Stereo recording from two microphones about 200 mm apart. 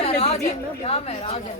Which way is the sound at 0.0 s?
30° left (ahead or behind).